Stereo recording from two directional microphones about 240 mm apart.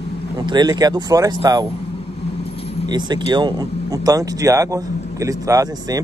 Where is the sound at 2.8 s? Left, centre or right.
Centre.